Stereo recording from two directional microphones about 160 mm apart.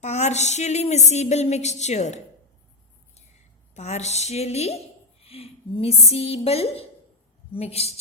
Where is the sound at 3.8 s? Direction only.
45° left (ahead or behind).